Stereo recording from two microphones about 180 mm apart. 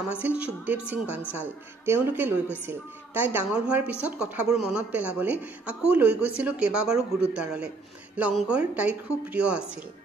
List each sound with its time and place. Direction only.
0.1 s a woman's voice: 10° right (ahead or behind)